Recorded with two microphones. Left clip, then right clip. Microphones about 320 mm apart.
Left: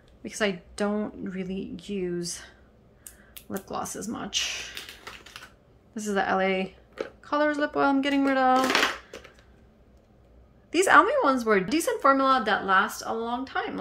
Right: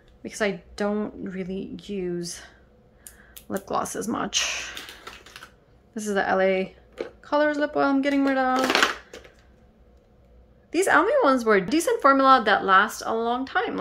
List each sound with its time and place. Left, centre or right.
0.2 s speech: centre
5.9 s speech: centre
10.7 s speech: centre